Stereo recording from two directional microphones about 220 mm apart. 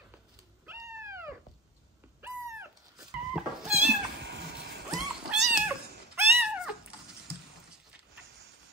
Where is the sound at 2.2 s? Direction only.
5° right (ahead or behind).